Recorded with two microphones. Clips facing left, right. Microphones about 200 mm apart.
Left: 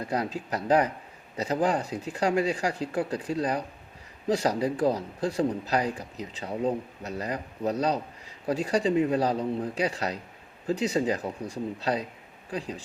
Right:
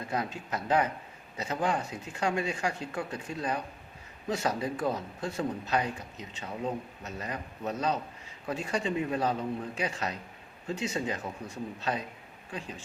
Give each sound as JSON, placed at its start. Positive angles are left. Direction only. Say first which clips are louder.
{"t": 0.1, "sound": "speech", "louder": "left 3 dB", "side_deg": 35}